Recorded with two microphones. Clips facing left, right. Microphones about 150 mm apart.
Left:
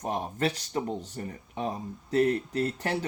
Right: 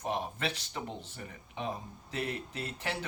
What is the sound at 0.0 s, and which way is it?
Speech, 40° left (ahead or behind).